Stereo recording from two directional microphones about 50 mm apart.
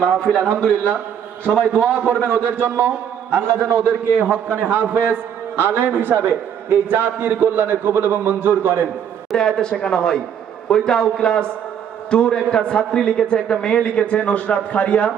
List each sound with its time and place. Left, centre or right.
0.0 s a man's voice: centre
1.7 s a man's voice: right
9.3 s a man's voice: centre